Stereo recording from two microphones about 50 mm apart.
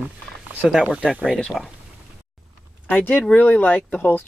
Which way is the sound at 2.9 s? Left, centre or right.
Left.